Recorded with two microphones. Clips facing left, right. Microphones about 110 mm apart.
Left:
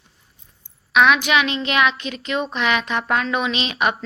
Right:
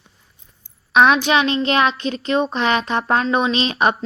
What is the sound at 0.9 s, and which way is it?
A woman's voice, 35° right (ahead or behind).